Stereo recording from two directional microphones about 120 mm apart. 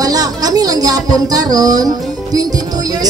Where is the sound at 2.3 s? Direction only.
30° right (ahead or behind).